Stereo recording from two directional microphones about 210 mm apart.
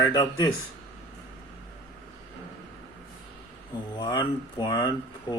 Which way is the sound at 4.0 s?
20° left (ahead or behind).